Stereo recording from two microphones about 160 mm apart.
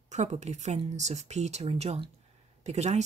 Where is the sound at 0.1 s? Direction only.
45° right (ahead or behind).